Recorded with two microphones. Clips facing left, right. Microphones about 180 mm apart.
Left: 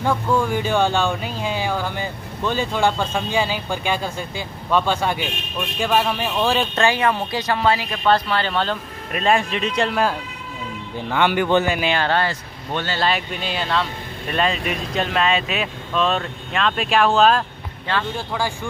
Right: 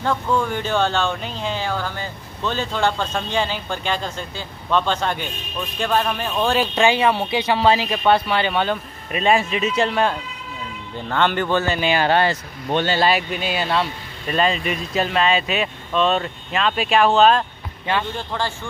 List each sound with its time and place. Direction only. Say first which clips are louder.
0.0 s speech: left 1 dB; 10° left (ahead or behind); by 6.9 s 5° right (ahead or behind)
7.2 s speech: right 2 dB; 25° right (ahead or behind)
9.1 s speech: right 1 dB; centre (ahead or behind); by 11.8 s 15° left (ahead or behind)
11.8 s speech: right 2 dB; 10° right (ahead or behind)
13.0 s speech: right 3 dB; 5° right (ahead or behind)